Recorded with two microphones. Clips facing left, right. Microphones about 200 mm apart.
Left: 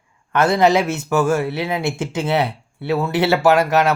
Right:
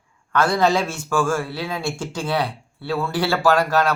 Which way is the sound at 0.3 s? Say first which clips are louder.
Left 3 dB; 20° left (ahead or behind).